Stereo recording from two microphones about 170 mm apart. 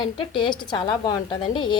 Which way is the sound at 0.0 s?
30° left (ahead or behind).